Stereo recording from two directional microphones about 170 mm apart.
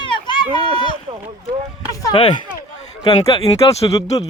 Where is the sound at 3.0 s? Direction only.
30° left (ahead or behind).